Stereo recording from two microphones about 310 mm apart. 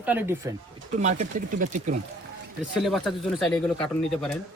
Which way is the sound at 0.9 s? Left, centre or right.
Right.